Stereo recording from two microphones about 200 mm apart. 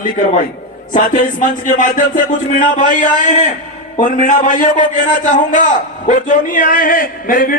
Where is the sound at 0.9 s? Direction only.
40° left (ahead or behind).